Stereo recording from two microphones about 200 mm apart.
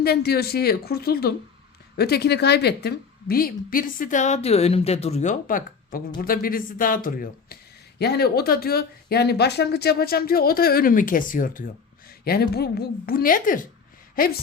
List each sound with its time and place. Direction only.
0.0 s speech: 50° left (ahead or behind)